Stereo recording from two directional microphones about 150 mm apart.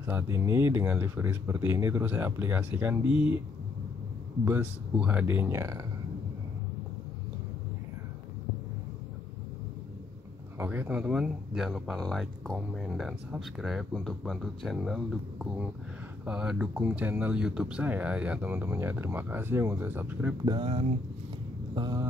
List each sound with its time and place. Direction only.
0.0 s speech: 15° right (ahead or behind)
3.1 s speech: 35° left (ahead or behind)
4.5 s speech: 10° right (ahead or behind)
10.6 s speech: 15° right (ahead or behind)
20.4 s speech: 35° right (ahead or behind)